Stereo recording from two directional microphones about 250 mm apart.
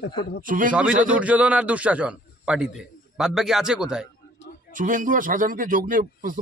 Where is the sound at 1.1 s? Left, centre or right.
Centre.